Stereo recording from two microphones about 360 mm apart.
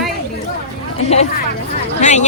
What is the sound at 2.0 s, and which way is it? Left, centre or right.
Speech, centre.